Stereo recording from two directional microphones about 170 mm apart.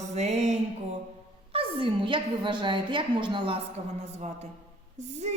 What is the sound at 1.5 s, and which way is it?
A woman's voice, 30° right (ahead or behind).